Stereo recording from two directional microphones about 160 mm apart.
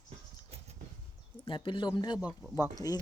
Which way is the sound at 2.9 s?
20° left (ahead or behind).